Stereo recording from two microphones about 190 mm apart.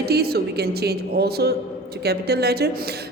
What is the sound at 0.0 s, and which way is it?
A woman's voice, 55° right (ahead or behind).